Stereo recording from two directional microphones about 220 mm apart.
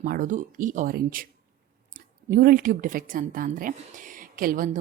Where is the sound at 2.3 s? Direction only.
40° right (ahead or behind).